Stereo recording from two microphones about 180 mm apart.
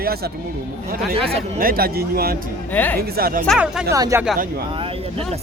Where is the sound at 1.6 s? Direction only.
55° right (ahead or behind).